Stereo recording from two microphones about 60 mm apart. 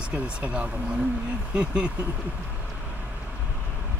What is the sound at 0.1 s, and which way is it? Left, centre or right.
Speech, right.